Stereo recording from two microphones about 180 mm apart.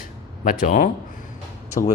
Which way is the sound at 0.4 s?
50° left (ahead or behind).